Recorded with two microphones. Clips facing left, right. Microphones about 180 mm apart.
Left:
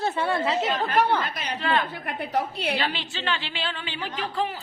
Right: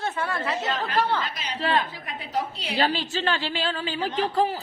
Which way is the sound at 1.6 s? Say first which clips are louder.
Right 1 dB; 30° right (ahead or behind).